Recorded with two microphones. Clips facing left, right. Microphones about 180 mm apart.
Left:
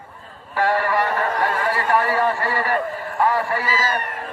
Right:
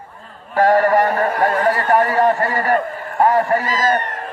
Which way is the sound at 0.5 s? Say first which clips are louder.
Right 7 dB; 45° right (ahead or behind).